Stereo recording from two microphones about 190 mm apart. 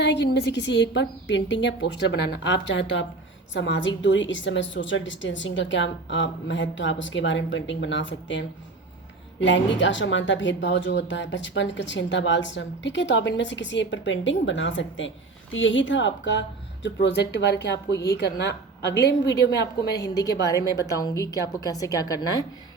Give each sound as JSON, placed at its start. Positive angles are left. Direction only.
{"t": 0.0, "sound": "a woman's voice", "side_deg": 65}
{"t": 20.0, "sound": "a woman's voice", "side_deg": 20}